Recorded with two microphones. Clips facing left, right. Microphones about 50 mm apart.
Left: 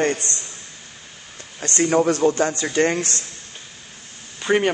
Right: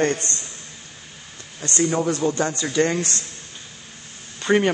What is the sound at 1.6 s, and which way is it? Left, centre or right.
Speech, left.